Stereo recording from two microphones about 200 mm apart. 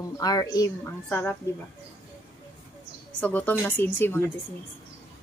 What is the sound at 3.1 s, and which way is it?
A woman's voice, 5° left (ahead or behind).